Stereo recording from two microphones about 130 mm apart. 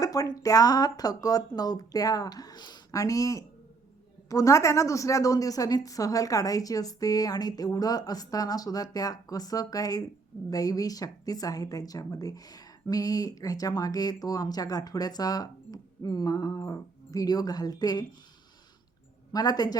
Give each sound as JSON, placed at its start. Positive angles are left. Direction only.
{"t": 0.0, "sound": "speech", "side_deg": 25}
{"t": 19.3, "sound": "speech", "side_deg": 30}